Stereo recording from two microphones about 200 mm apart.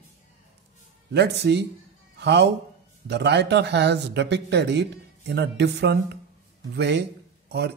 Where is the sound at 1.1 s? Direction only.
55° right (ahead or behind).